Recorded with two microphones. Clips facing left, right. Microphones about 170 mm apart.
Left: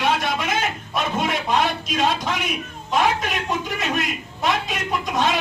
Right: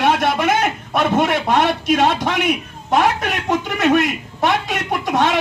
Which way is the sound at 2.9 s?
65° right (ahead or behind).